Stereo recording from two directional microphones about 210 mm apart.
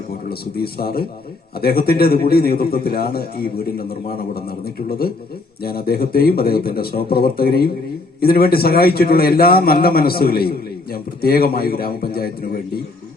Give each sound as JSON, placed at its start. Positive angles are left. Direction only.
{"t": 0.3, "sound": "a man's voice", "side_deg": 45}